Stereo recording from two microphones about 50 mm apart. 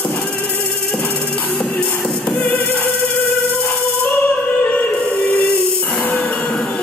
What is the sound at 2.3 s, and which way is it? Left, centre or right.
Music, left.